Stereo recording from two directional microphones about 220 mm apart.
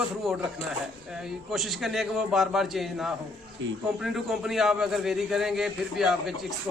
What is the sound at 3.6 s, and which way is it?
Speech, 55° right (ahead or behind).